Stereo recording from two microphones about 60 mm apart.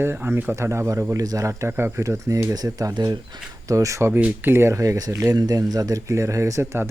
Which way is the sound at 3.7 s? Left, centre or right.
Right.